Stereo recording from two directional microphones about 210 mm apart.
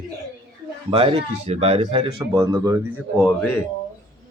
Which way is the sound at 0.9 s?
25° right (ahead or behind).